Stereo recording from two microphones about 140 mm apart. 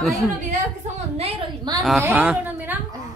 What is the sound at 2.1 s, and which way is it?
Speech, 10° right (ahead or behind).